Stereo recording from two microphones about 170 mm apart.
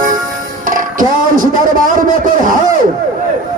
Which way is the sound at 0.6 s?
50° right (ahead or behind).